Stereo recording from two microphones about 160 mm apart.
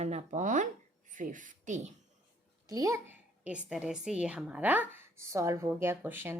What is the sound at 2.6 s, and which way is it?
Speech, 20° right (ahead or behind).